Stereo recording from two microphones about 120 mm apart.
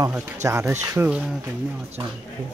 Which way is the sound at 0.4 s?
25° right (ahead or behind).